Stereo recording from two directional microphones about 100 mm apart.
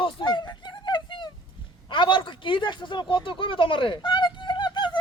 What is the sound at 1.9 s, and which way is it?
Speech, 55° left (ahead or behind).